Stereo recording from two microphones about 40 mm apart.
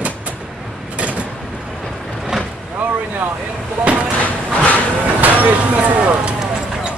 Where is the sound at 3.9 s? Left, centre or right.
Right.